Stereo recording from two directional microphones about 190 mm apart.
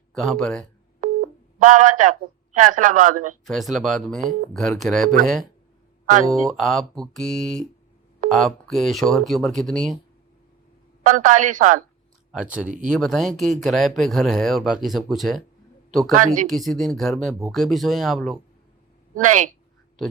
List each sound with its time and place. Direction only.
0.1 s speech: centre (ahead or behind)
1.0 s busy signal: 45° right (ahead or behind)
1.5 s a man's voice: 40° right (ahead or behind)
3.4 s speech: centre (ahead or behind)
6.3 s speech: centre (ahead or behind)
11.0 s a man's voice: 40° right (ahead or behind)
12.3 s speech: 5° right (ahead or behind)
12.6 s a man's voice: 40° right (ahead or behind)
13.0 s a man's voice: centre (ahead or behind)
19.1 s a man's voice: 40° right (ahead or behind)